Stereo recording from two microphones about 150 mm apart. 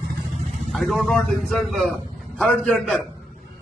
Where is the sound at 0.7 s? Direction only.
Centre (ahead or behind).